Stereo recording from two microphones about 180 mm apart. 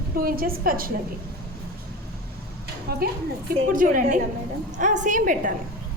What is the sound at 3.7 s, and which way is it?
A woman's voice, 50° right (ahead or behind).